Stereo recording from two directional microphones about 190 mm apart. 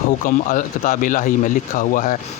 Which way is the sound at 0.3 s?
45° left (ahead or behind).